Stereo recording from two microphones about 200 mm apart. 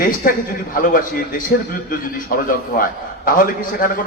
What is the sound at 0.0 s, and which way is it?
A man's voice, 40° left (ahead or behind).